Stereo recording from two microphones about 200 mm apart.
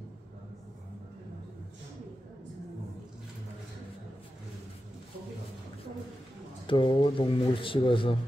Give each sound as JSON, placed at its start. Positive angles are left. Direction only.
{"t": 6.7, "sound": "speech", "side_deg": 25}